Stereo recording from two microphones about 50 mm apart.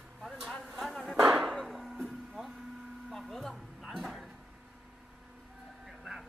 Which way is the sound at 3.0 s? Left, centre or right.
Centre.